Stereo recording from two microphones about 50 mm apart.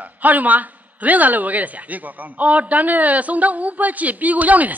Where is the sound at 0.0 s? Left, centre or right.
Right.